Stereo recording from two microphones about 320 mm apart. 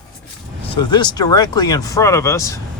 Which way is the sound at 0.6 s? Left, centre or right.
Centre.